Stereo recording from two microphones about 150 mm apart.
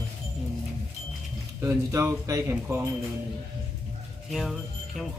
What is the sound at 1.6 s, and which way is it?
Speech, 20° right (ahead or behind).